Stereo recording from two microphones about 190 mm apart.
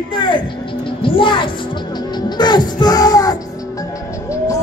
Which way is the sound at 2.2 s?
25° left (ahead or behind).